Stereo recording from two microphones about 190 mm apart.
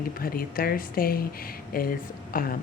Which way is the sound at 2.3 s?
50° left (ahead or behind).